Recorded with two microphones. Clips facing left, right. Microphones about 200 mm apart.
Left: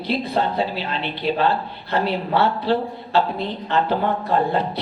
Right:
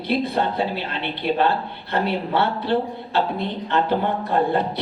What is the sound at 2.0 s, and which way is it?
Speech, 60° right (ahead or behind).